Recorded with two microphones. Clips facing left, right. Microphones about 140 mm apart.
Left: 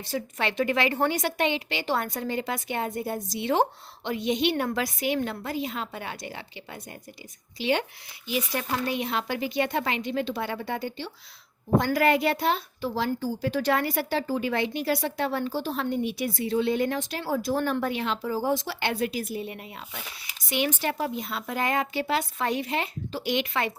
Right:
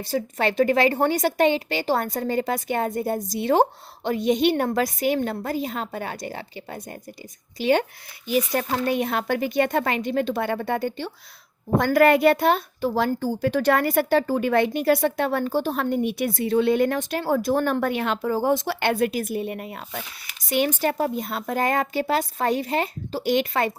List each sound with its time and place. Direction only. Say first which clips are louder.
0.0 s a woman's voice: right 5 dB; 40° right (ahead or behind)